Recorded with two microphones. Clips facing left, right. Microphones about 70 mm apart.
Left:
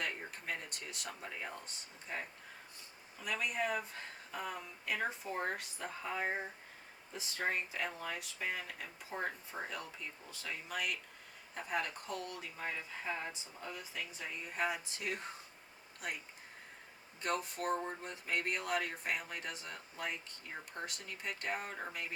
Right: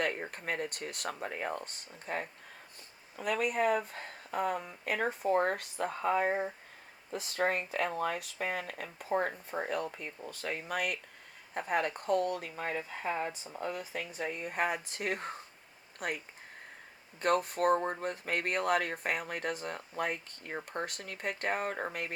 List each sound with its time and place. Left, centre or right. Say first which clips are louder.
0.0 s speech: right 7 dB; right